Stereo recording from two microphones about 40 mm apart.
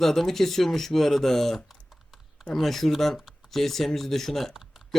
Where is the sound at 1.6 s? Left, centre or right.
Centre.